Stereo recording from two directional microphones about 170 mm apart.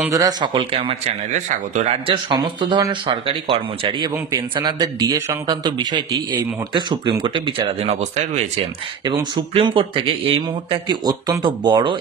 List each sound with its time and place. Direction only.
0.1 s speech: 20° right (ahead or behind); by 8.5 s 40° right (ahead or behind)
9.0 s speech: 25° right (ahead or behind)